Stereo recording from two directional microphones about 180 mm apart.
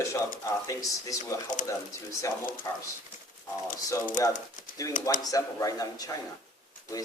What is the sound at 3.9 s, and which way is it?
A man's voice, 20° left (ahead or behind).